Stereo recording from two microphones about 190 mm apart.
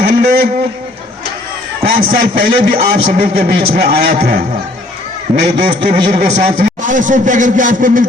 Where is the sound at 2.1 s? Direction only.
50° right (ahead or behind).